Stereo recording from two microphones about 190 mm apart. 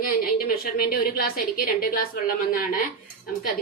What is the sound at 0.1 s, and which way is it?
A woman's voice, 50° left (ahead or behind).